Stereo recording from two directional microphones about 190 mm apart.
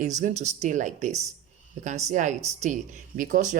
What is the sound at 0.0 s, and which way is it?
Speech, 40° right (ahead or behind).